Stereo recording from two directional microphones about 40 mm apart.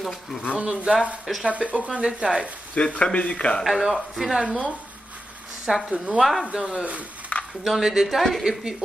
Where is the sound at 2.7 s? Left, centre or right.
Left.